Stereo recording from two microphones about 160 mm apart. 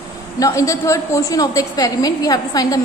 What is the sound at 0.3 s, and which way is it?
A woman's voice, 20° left (ahead or behind).